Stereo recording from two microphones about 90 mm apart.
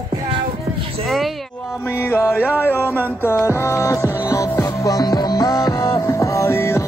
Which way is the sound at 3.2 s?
30° left (ahead or behind).